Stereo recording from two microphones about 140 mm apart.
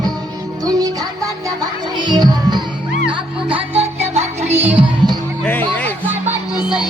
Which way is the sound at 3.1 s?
40° right (ahead or behind).